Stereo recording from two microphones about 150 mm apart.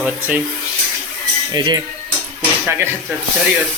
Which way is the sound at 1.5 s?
30° right (ahead or behind).